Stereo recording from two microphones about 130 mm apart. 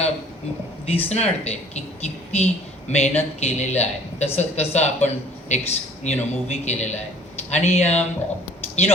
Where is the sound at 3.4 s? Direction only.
55° left (ahead or behind).